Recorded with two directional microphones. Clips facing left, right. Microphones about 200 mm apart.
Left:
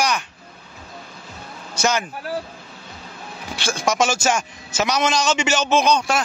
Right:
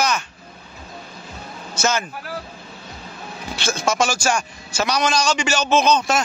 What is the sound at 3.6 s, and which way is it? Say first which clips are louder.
A man's voice: even; 10° left (ahead or behind).